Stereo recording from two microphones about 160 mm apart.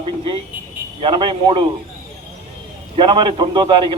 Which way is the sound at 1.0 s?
30° right (ahead or behind).